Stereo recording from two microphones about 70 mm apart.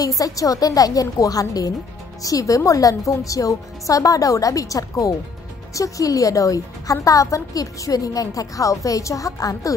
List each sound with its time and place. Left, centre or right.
0.2 s a woman's voice: left